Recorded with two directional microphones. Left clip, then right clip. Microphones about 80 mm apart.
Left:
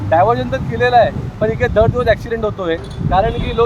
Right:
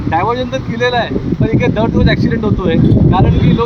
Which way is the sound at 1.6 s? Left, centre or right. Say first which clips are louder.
Left 3 dB; left.